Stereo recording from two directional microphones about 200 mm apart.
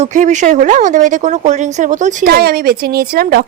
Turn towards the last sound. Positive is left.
turn(degrees=-50)  # may be behind; listen again after turning